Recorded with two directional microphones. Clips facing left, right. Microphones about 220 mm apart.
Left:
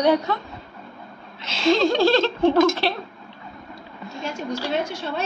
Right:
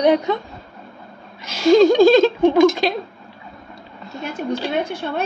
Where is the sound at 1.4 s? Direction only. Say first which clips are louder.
Right 7 dB; 10° right (ahead or behind).